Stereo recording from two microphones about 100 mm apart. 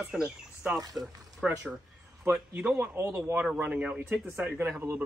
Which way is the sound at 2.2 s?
20° right (ahead or behind).